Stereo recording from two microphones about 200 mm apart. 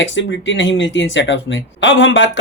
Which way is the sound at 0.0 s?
65° left (ahead or behind).